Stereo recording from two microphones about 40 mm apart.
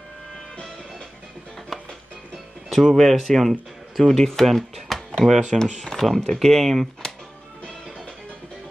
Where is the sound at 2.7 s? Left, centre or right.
Centre.